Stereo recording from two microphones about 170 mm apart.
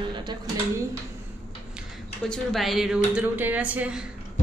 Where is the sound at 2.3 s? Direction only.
Centre (ahead or behind).